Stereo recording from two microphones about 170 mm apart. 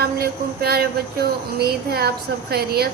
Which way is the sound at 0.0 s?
65° right (ahead or behind).